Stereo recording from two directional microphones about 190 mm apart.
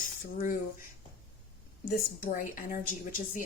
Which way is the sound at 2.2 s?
45° left (ahead or behind).